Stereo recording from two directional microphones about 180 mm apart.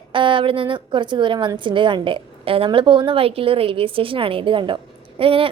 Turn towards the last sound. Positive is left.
turn(degrees=-30)  # may be behind; listen again after turning